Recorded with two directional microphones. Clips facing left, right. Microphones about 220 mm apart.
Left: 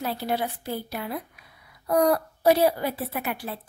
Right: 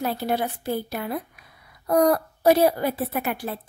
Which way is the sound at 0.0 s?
50° right (ahead or behind).